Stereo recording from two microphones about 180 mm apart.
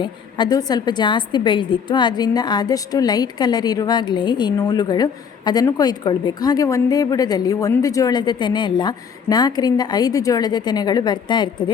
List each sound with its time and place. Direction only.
0.0 s a woman's voice: 25° left (ahead or behind)